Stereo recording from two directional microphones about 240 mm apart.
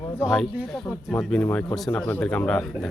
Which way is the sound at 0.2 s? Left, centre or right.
Centre.